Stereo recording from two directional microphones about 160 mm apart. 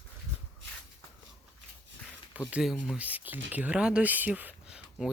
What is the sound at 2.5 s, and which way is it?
Speech, 5° right (ahead or behind).